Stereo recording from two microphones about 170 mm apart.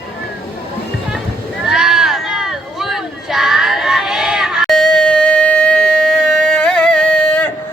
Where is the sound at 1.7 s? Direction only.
5° right (ahead or behind).